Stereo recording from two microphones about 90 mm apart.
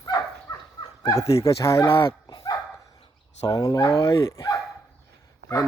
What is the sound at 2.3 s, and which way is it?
Bow-wow, 45° left (ahead or behind).